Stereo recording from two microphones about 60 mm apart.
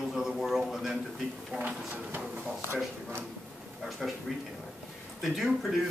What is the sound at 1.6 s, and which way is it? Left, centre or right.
Speech, right.